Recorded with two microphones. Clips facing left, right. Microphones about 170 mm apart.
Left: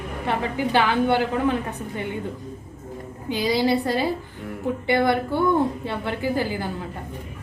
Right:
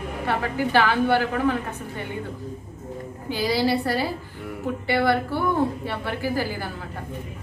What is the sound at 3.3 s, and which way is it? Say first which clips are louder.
A woman's voice: left 1 dB; 20° left (ahead or behind).